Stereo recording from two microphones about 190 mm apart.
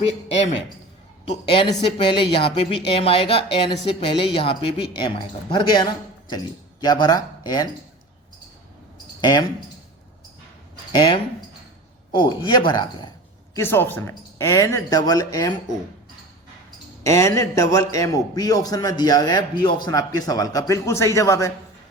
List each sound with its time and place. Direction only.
0.0 s a man's voice: 75° left (ahead or behind)
1.3 s a man's voice: 30° left (ahead or behind)
9.2 s a man's voice: 25° left (ahead or behind)
10.9 s a man's voice: 25° left (ahead or behind)
13.6 s speech: 10° left (ahead or behind)
17.0 s a man's voice: 15° left (ahead or behind)